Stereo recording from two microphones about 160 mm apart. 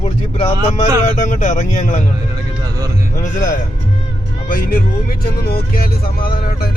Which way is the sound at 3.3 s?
55° left (ahead or behind).